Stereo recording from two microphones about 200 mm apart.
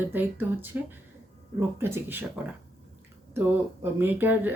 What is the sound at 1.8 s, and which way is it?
Speech, 10° right (ahead or behind).